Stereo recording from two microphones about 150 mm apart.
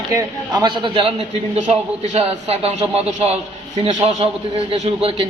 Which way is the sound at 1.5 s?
50° right (ahead or behind).